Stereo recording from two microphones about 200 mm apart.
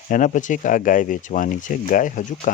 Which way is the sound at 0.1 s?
40° left (ahead or behind).